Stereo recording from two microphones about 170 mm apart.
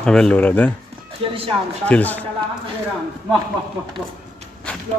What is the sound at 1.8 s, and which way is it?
Speech, 10° left (ahead or behind).